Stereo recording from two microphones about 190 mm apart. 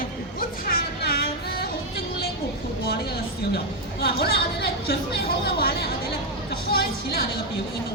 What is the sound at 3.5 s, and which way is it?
Speech, 55° left (ahead or behind).